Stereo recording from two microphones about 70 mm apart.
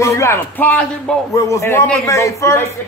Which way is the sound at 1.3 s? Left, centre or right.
Left.